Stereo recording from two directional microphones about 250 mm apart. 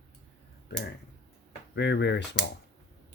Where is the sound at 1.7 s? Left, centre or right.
Left.